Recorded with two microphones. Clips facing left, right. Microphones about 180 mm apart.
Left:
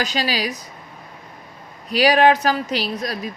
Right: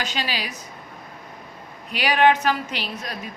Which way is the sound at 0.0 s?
40° left (ahead or behind).